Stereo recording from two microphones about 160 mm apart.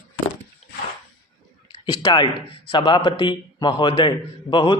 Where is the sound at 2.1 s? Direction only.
30° left (ahead or behind).